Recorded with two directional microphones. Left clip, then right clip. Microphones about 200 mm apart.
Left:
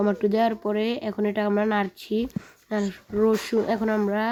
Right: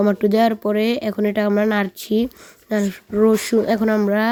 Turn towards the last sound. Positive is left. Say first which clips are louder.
# right 6 dB
turn(degrees=-35)  # may be behind; listen again after turning